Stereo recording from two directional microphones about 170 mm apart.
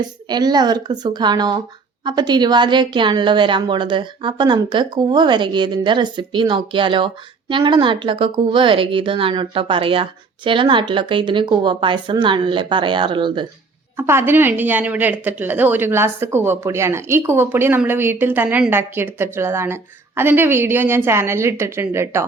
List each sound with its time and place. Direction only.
0.0 s a woman's voice: 25° right (ahead or behind)
13.9 s speech: 15° right (ahead or behind)